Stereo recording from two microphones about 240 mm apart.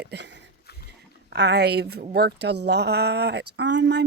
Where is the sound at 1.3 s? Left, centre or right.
Right.